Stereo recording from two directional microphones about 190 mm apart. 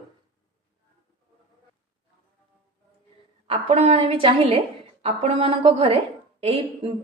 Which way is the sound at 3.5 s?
35° right (ahead or behind).